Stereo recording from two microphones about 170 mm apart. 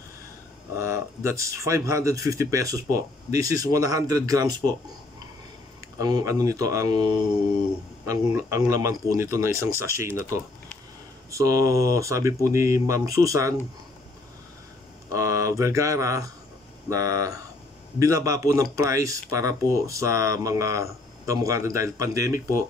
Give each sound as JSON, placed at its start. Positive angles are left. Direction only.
{"t": 0.7, "sound": "speech", "side_deg": -15}
{"t": 5.9, "sound": "speech", "side_deg": -20}
{"t": 15.0, "sound": "speech", "side_deg": -20}